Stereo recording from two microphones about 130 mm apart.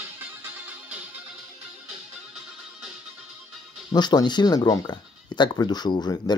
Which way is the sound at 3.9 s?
35° left (ahead or behind).